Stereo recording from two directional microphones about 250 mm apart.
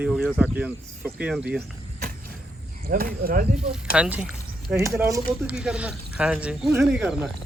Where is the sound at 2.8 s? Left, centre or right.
Right.